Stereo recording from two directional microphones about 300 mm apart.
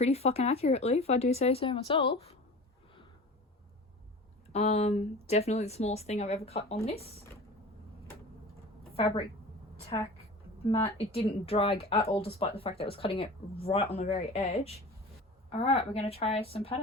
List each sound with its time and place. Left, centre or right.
0.0 s speech: left
4.5 s speech: left
9.0 s a woman's voice: centre